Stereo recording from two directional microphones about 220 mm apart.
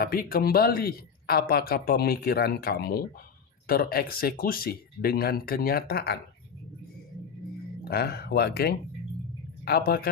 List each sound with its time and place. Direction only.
0.0 s speech: 40° left (ahead or behind)
7.9 s speech: 45° left (ahead or behind)